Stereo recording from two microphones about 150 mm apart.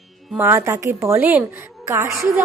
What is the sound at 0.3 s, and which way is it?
A woman's voice, 15° right (ahead or behind).